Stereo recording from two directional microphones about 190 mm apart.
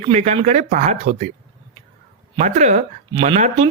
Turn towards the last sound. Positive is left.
turn(degrees=-35)  # may be behind; listen again after turning